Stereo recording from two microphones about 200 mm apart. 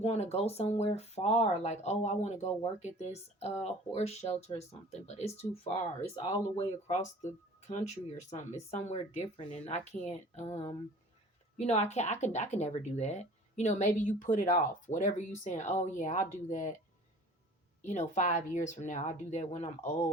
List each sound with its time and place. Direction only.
0.0 s speech: 30° left (ahead or behind)
8.3 s speech: 35° left (ahead or behind)
17.8 s speech: 35° left (ahead or behind)